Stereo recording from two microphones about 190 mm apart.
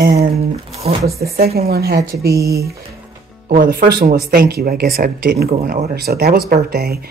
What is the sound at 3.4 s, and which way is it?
Speech, 45° right (ahead or behind).